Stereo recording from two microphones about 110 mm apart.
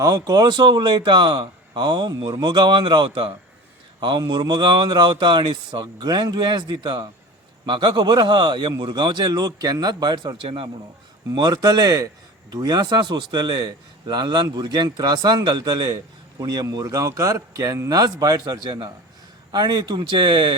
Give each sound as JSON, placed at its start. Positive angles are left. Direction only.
{"t": 0.0, "sound": "speech", "side_deg": -35}
{"t": 11.3, "sound": "speech", "side_deg": -40}